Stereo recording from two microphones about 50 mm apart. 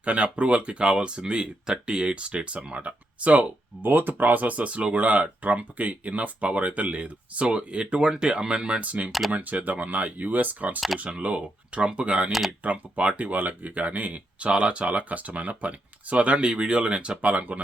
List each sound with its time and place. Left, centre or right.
0.0 s speech: right
3.8 s speech: right
12.3 s speech: centre
12.6 s speech: right